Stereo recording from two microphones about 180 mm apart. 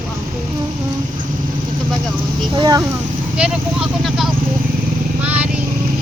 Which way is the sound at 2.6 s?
20° right (ahead or behind).